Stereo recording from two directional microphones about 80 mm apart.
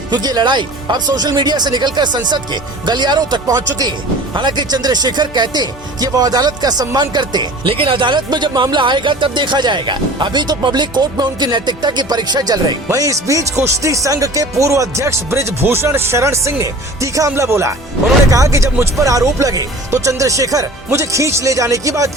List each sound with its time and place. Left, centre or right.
0.1 s speech: right
3.4 s speech: right
4.4 s speech: right
12.9 s speech: right